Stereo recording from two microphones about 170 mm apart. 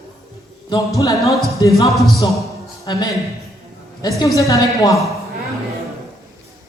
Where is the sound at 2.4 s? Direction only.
20° left (ahead or behind).